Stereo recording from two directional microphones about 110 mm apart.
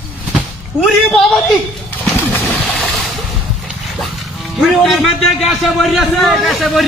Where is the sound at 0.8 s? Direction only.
Centre (ahead or behind).